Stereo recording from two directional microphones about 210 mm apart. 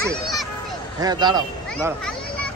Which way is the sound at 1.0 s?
20° right (ahead or behind).